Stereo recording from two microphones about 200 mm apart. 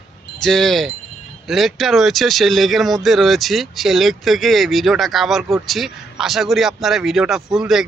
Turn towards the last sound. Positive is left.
turn(degrees=0)  # may be behind; listen again after turning